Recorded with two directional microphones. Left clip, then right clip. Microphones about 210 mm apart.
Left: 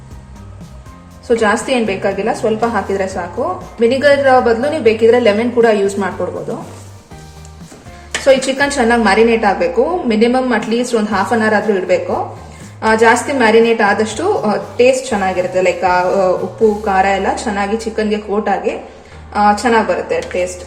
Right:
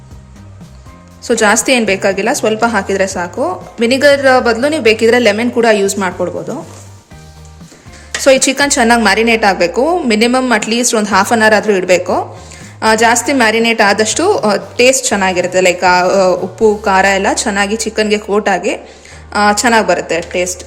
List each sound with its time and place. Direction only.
1.2 s a woman's voice: 55° right (ahead or behind)
8.2 s a woman's voice: 55° right (ahead or behind)